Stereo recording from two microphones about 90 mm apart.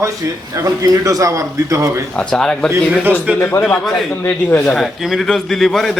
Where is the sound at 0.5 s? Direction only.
35° right (ahead or behind).